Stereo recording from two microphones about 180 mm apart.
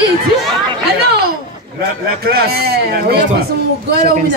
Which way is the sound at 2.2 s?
60° right (ahead or behind).